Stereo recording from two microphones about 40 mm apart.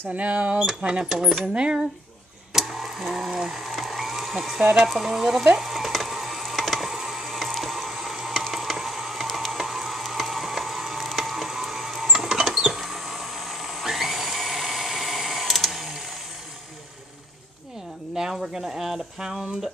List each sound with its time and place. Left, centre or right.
0.1 s speech: right
0.6 s speech: centre
1.5 s speech: right
2.5 s a sound: centre
4.8 s speech: centre
5.6 s sizzle: centre
6.5 s ratchet: centre
18.1 s a sound: centre